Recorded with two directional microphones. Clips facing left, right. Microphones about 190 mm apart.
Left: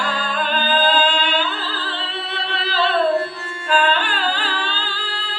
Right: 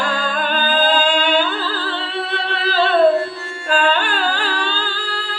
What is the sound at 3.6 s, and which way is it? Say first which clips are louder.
Music: right 1 dB; 45° right (ahead or behind).